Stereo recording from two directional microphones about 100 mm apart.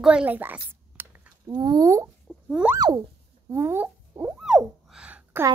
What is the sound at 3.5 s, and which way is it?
Speech, 25° right (ahead or behind).